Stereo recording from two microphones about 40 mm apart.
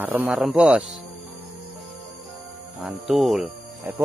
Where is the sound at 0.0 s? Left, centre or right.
Right.